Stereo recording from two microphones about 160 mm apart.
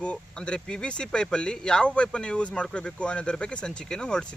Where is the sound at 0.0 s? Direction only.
5° left (ahead or behind).